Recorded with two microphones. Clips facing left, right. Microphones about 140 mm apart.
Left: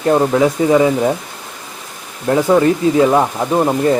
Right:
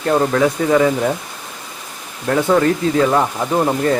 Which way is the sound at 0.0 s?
15° left (ahead or behind).